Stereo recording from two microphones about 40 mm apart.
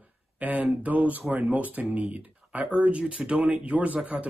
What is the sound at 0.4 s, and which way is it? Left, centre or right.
Speech, right.